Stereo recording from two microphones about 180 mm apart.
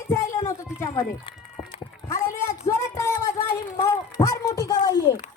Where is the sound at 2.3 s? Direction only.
15° left (ahead or behind).